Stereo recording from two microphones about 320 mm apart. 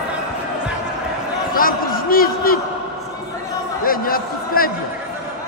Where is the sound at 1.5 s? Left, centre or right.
Left.